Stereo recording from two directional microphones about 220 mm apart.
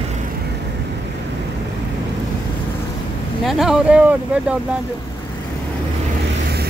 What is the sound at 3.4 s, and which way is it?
Speech, centre (ahead or behind).